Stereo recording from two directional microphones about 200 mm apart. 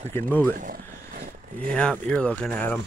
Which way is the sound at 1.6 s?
5° left (ahead or behind).